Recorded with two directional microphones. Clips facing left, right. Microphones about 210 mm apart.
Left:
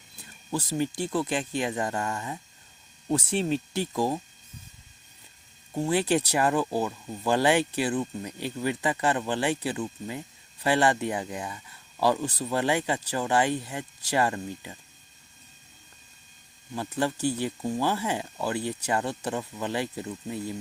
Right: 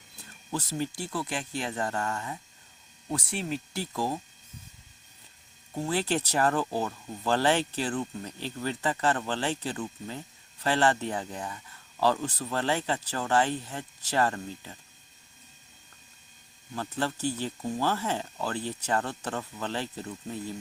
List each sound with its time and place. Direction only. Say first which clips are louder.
0.5 s speech: left 4 dB; 15° left (ahead or behind)
5.8 s speech: left 4 dB; 15° left (ahead or behind)
16.7 s speech: left 3 dB; 15° left (ahead or behind)